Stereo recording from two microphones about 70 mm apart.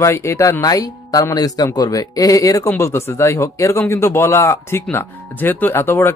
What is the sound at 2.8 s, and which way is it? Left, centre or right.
Speech, left.